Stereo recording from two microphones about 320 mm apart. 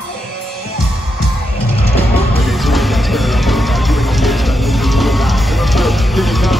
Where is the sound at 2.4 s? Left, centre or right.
Centre.